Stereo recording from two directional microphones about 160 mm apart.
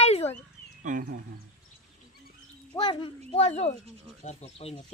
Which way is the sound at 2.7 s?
30° left (ahead or behind).